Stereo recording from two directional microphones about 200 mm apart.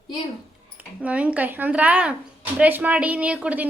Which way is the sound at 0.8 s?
5° right (ahead or behind).